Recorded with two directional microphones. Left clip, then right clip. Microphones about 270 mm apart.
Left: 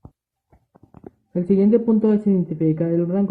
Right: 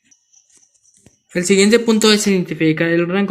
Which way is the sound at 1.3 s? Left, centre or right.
Centre.